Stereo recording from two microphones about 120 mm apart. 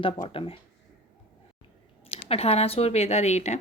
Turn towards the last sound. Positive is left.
turn(degrees=70)  # may be behind; listen again after turning